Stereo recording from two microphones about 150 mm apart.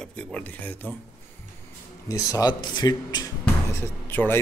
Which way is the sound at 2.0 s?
20° left (ahead or behind).